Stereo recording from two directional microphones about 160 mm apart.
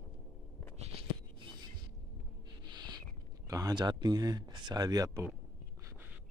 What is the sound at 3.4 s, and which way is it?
Speech, 25° right (ahead or behind).